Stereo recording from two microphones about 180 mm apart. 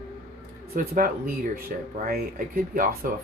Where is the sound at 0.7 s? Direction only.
50° right (ahead or behind).